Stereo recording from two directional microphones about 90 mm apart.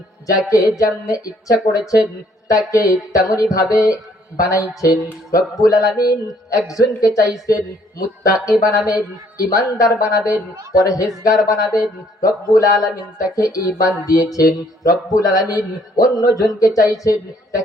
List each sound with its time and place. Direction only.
0.3 s speech: 40° left (ahead or behind)